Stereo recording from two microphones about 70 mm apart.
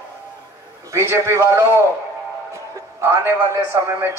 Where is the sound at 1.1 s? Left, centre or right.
Right.